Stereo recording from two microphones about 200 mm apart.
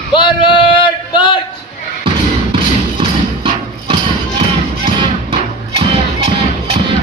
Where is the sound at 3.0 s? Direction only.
25° right (ahead or behind).